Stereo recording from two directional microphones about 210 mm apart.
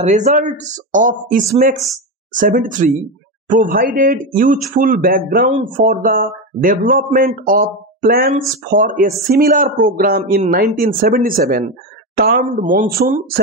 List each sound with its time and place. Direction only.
0.0 s speech: 35° right (ahead or behind)